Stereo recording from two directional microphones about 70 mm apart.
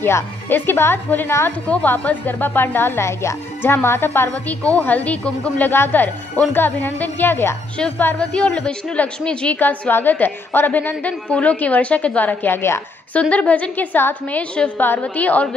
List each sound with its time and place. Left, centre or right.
0.0 s a woman's voice: left
1.7 s a woman's voice: left
4.3 s a woman's voice: left
5.7 s a woman's voice: left
8.2 s a woman's voice: centre
9.6 s a woman's voice: left
13.1 s a woman's voice: centre